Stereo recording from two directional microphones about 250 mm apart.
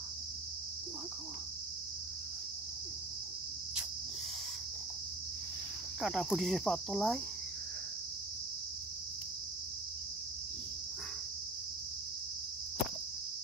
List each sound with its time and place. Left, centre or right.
5.9 s cricket: centre